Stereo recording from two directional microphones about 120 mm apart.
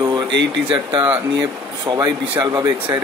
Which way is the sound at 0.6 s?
45° right (ahead or behind).